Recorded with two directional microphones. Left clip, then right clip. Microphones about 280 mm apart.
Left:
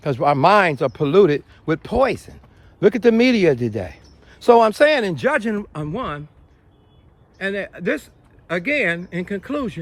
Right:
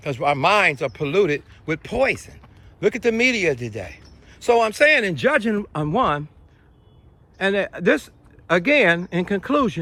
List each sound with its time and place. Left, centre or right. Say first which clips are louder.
0.0 s speech: left 4 dB; left; by 6.2 s centre
7.3 s speech: right 4 dB; centre